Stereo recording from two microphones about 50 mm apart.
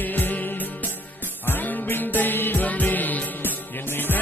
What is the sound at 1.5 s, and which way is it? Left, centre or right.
Music, left.